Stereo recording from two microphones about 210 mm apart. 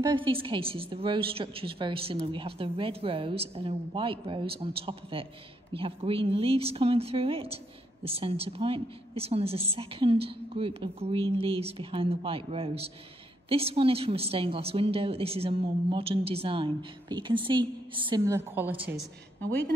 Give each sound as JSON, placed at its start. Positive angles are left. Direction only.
{"t": 0.0, "sound": "a woman's voice", "side_deg": -25}